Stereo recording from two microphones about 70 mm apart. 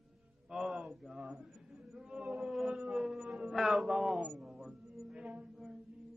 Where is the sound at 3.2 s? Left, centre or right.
Centre.